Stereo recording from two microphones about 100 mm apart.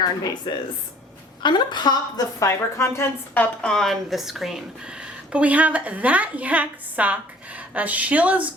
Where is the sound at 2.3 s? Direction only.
30° left (ahead or behind).